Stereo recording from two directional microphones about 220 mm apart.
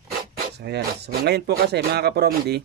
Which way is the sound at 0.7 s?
50° right (ahead or behind).